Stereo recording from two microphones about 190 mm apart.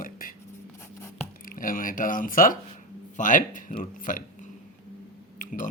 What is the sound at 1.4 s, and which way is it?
Speech, 45° left (ahead or behind).